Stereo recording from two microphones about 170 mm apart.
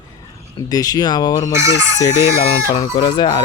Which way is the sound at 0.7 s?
20° left (ahead or behind).